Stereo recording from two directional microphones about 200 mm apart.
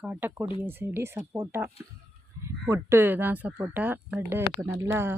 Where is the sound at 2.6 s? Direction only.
15° right (ahead or behind).